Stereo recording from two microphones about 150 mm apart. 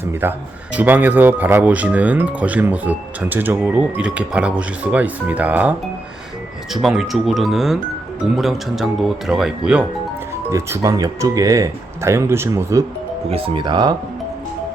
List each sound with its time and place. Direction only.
0.0 s speech: 15° right (ahead or behind)
6.8 s speech: centre (ahead or behind)
10.5 s speech: 20° right (ahead or behind)
13.3 s speech: 35° right (ahead or behind)